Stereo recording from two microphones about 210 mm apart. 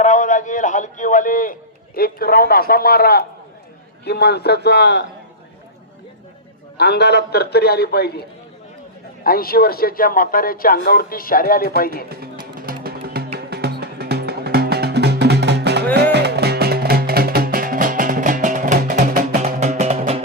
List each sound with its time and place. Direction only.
0.0 s a man's voice: 35° left (ahead or behind); by 5.0 s 55° left (ahead or behind)
6.7 s a man's voice: 50° left (ahead or behind)
9.2 s a man's voice: 45° left (ahead or behind)
12.5 s music: 45° right (ahead or behind)